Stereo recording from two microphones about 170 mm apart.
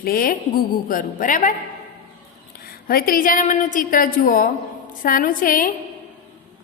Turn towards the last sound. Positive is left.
turn(degrees=55)  # may be behind; listen again after turning